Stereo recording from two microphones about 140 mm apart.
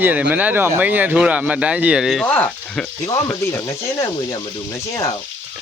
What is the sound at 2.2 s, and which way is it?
Frying, 10° left (ahead or behind).